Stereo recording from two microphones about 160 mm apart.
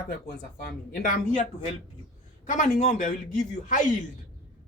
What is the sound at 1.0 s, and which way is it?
Speech, 55° left (ahead or behind).